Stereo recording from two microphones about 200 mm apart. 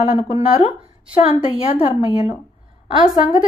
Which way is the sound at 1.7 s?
25° left (ahead or behind).